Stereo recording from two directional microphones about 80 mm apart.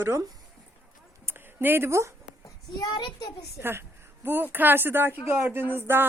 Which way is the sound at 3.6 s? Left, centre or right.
Right.